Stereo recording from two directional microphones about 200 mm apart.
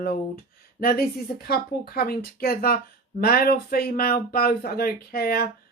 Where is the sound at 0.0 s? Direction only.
50° left (ahead or behind).